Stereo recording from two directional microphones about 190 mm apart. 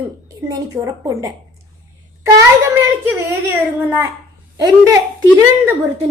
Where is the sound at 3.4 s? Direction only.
10° right (ahead or behind).